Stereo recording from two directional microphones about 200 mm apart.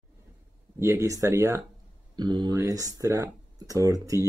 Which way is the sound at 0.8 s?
15° right (ahead or behind).